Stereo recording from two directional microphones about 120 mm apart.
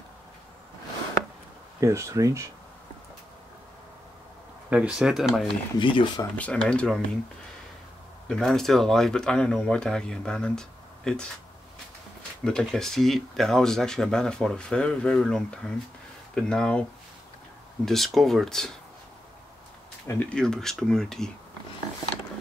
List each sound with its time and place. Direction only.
1.8 s speech: 25° right (ahead or behind)
4.6 s speech: 10° right (ahead or behind)
5.8 s speech: 45° left (ahead or behind)
6.3 s speech: 10° left (ahead or behind)
8.3 s speech: 5° left (ahead or behind)
12.4 s speech: 5° left (ahead or behind)
17.8 s speech: centre (ahead or behind)
20.1 s speech: 10° left (ahead or behind)